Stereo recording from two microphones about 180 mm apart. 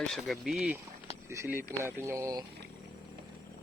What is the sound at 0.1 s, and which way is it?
Speech, centre (ahead or behind).